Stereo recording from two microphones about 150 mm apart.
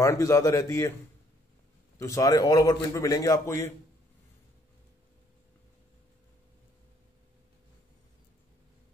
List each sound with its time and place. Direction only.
0.0 s a man's voice: 20° left (ahead or behind)
2.0 s a man's voice: 20° left (ahead or behind)